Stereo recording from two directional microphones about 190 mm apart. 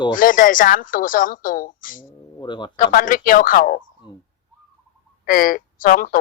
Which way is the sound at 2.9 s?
45° left (ahead or behind).